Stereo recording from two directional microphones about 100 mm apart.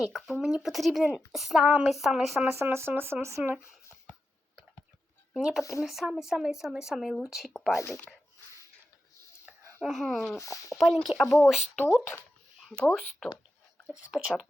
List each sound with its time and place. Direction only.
0.0 s speech: centre (ahead or behind)
2.4 s speech: 20° right (ahead or behind)
5.3 s speech: 5° right (ahead or behind)
9.8 s speech: centre (ahead or behind)
10.3 s speech: 30° left (ahead or behind)
10.8 s speech: centre (ahead or behind)
11.8 s speech: 20° left (ahead or behind)
12.9 s speech: 5° left (ahead or behind)
13.9 s speech: 5° right (ahead or behind)